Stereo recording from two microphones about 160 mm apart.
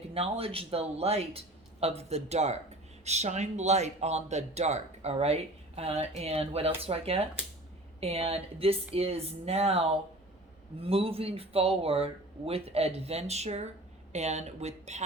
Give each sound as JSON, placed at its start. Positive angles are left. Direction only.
{"t": 0.1, "sound": "speech", "side_deg": -40}
{"t": 10.8, "sound": "speech", "side_deg": -35}